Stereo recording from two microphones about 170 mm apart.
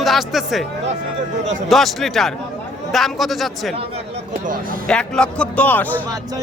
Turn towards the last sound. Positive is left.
turn(degrees=10)  # may be behind; listen again after turning